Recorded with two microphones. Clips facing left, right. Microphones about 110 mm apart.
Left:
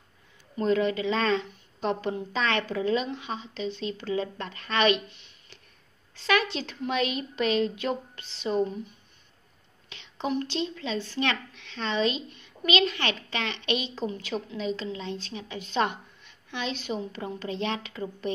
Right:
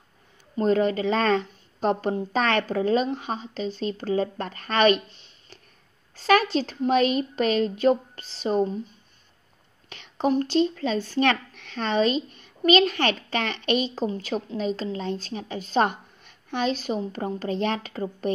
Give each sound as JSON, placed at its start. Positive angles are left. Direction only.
{"t": 0.6, "sound": "speech", "side_deg": -40}
{"t": 9.8, "sound": "speech", "side_deg": -45}